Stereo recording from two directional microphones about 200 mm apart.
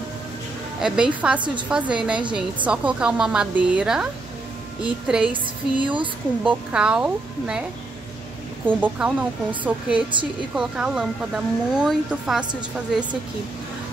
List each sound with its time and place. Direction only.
0.7 s speech: 5° right (ahead or behind)
1.4 s a woman's voice: 25° right (ahead or behind)
1.7 s speech: 5° right (ahead or behind)
5.2 s music: 25° right (ahead or behind)
6.4 s speech: 5° right (ahead or behind)
8.6 s speech: 5° right (ahead or behind)